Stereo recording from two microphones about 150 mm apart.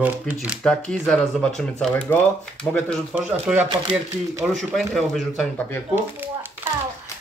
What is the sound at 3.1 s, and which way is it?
Speech, 5° right (ahead or behind).